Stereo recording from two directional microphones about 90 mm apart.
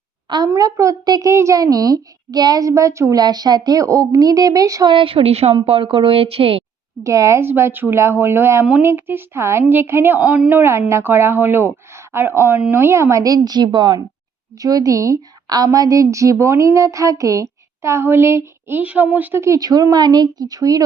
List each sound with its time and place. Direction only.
0.3 s a woman's voice: 55° right (ahead or behind)
0.6 s a woman's voice: 40° right (ahead or behind)
3.2 s speech: 50° right (ahead or behind)
4.9 s speech: 80° right
7.0 s a woman's voice: 35° right (ahead or behind)
18.8 s a woman's voice: 20° right (ahead or behind)
19.4 s speech: 40° right (ahead or behind)